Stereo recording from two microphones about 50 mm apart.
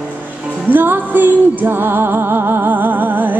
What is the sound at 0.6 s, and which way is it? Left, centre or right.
Music, right.